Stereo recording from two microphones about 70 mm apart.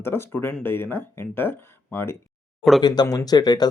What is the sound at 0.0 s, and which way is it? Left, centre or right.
Speech, left.